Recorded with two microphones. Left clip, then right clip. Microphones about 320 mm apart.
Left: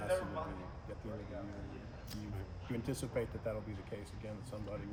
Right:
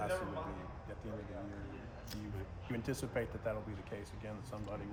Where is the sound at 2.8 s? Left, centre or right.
Centre.